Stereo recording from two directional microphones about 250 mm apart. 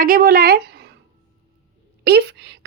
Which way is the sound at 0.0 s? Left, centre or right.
Right.